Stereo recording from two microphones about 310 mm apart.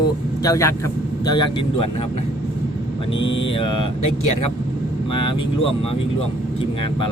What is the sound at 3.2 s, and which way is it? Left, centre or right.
Speech, centre.